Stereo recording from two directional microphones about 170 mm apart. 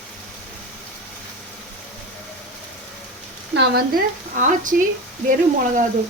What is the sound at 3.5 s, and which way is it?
Speech, 80° right.